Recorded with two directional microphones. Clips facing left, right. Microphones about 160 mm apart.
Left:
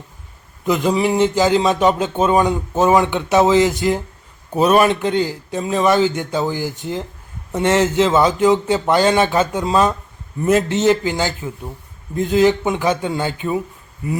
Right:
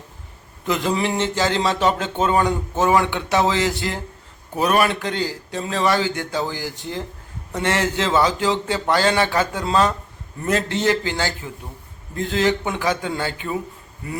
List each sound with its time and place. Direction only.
0.7 s a man's voice: 15° left (ahead or behind)